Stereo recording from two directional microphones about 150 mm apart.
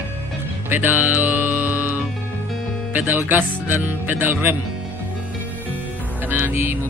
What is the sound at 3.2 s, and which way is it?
Speech, 10° right (ahead or behind).